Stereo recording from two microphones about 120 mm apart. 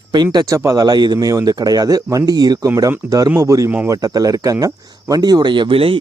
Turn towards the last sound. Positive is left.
turn(degrees=-50)  # may be behind; listen again after turning